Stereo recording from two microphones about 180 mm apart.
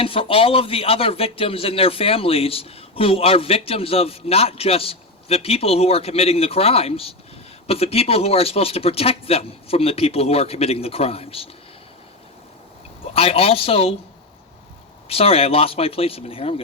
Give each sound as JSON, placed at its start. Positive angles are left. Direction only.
{"t": 0.0, "sound": "a man's voice", "side_deg": 30}
{"t": 13.1, "sound": "a man's voice", "side_deg": 30}
{"t": 15.1, "sound": "a man's voice", "side_deg": 35}